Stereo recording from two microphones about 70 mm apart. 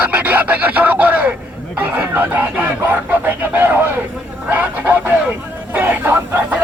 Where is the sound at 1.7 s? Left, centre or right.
Right.